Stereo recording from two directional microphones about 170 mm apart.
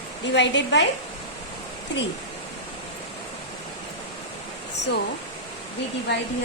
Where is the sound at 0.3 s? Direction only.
90° left.